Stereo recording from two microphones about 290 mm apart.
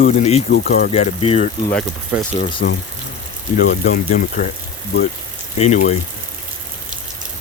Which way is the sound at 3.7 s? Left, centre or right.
Left.